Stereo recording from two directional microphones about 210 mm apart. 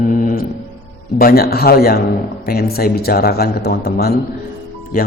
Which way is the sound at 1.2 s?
45° left (ahead or behind).